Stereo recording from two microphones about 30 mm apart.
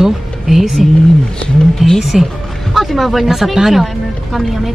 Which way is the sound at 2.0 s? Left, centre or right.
Centre.